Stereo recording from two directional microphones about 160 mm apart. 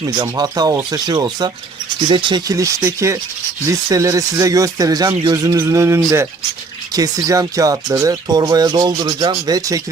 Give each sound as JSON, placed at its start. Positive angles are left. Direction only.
{"t": 0.1, "sound": "speech", "side_deg": -25}